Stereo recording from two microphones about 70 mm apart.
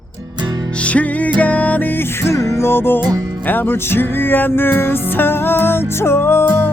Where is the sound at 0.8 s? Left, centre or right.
Centre.